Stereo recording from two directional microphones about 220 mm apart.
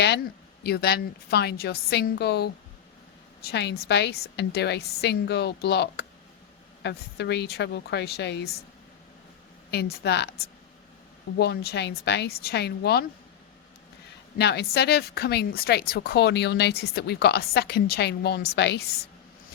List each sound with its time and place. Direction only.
0.6 s a woman's voice: 45° left (ahead or behind)
9.7 s a woman's voice: 45° left (ahead or behind)
11.3 s a woman's voice: 50° left (ahead or behind)
14.3 s a woman's voice: 50° left (ahead or behind)